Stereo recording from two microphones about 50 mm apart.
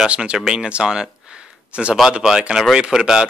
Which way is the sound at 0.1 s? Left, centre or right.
Right.